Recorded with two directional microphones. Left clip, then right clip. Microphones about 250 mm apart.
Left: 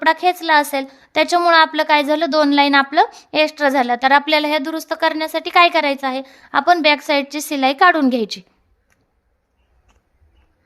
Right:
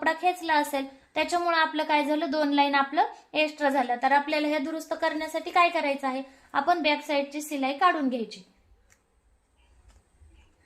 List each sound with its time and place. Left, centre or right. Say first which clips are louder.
0.0 s a woman's voice: left 10 dB; left